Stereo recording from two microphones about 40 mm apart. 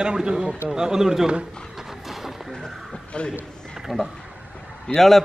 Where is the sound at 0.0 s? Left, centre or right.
Centre.